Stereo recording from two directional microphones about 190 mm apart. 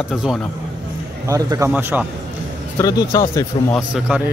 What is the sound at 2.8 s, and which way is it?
Speech, 20° left (ahead or behind).